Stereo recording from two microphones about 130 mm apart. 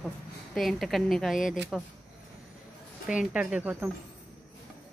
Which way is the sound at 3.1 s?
5° right (ahead or behind).